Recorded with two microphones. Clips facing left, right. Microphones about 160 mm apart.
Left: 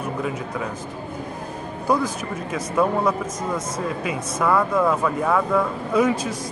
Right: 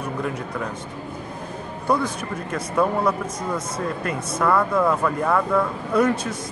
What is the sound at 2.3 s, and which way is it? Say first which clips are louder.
Speech: even; 5° left (ahead or behind).